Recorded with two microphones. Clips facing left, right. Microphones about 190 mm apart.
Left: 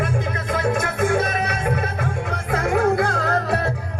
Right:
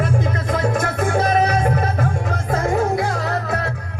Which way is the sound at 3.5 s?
30° left (ahead or behind).